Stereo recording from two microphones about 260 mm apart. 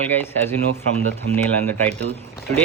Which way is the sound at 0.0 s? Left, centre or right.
Centre.